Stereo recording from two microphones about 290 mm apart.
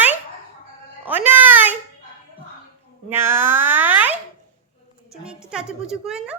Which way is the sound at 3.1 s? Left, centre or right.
Centre.